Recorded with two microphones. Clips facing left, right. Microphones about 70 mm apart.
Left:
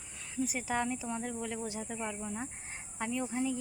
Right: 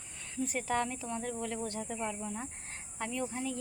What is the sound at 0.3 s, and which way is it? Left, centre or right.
Speech, centre.